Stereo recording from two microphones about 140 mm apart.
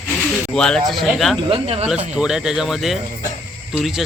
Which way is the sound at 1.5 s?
50° right (ahead or behind).